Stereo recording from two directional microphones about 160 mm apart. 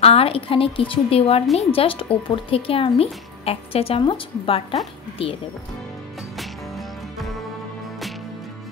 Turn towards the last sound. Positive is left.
turn(degrees=0)  # may be behind; listen again after turning